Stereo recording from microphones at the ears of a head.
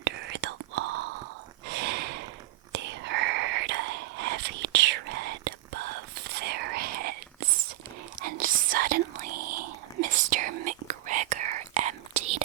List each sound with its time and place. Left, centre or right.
0.0 s whispering: right